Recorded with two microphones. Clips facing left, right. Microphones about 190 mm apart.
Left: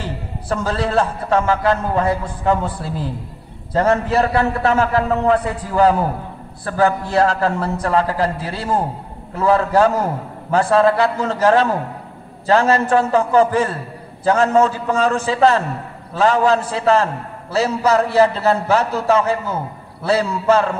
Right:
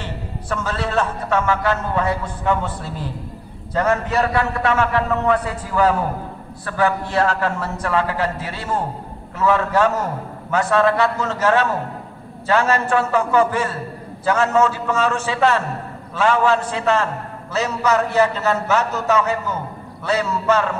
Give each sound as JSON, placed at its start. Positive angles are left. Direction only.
{"t": 0.0, "sound": "a man's voice", "side_deg": 35}